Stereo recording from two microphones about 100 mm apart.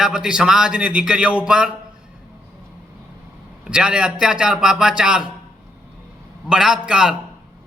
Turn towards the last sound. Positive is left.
turn(degrees=-10)  # may be behind; listen again after turning